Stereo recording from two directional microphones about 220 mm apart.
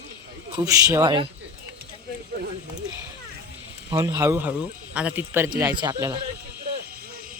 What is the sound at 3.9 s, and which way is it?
Speech, 15° right (ahead or behind).